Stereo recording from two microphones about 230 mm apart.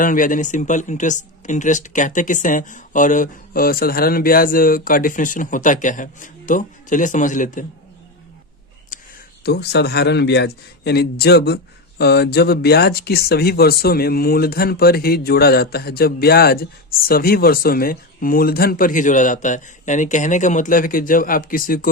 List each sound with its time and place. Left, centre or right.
0.0 s a man's voice: left
8.9 s a sound: left
9.4 s a man's voice: left